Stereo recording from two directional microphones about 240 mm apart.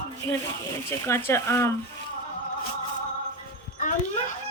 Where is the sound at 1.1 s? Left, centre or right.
Centre.